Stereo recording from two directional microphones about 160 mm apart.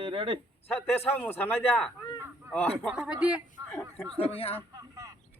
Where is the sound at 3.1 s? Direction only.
10° right (ahead or behind).